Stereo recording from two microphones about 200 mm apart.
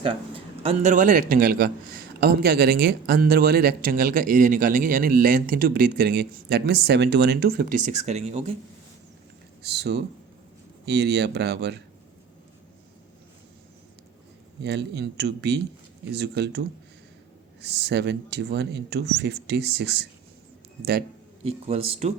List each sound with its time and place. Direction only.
0.0 s a man's voice: 25° right (ahead or behind)
9.6 s speech: 55° right (ahead or behind)
14.6 s speech: 55° right (ahead or behind)
21.4 s speech: 30° right (ahead or behind)